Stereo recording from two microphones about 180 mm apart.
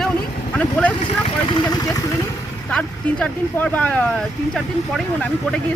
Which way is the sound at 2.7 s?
5° left (ahead or behind).